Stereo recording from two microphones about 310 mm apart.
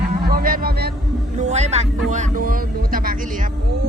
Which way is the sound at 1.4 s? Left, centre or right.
Right.